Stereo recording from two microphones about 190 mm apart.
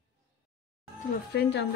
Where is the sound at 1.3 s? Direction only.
60° left (ahead or behind).